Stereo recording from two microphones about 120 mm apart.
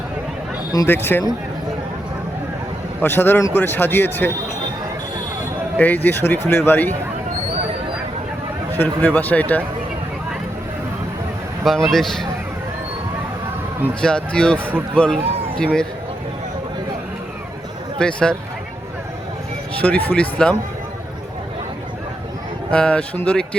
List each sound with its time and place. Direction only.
0.9 s a man's voice: 15° left (ahead or behind)
3.0 s a man's voice: 20° left (ahead or behind)
5.7 s a man's voice: 15° left (ahead or behind)
8.7 s a man's voice: 15° left (ahead or behind)
11.6 s speech: centre (ahead or behind)
14.0 s a man's voice: 5° left (ahead or behind)
18.0 s a man's voice: 5° left (ahead or behind)
19.8 s a man's voice: 15° left (ahead or behind)
22.7 s a man's voice: 10° left (ahead or behind)